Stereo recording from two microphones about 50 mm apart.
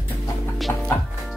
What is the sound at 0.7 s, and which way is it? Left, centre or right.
Music, left.